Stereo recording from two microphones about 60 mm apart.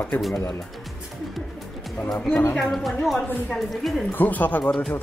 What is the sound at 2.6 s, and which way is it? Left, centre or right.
A woman's voice, centre.